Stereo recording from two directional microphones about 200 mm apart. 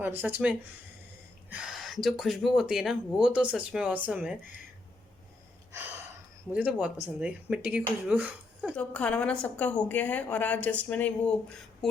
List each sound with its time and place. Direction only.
0.0 s speech: 10° right (ahead or behind)
6.5 s speech: 5° right (ahead or behind)
8.7 s a woman's voice: 5° left (ahead or behind)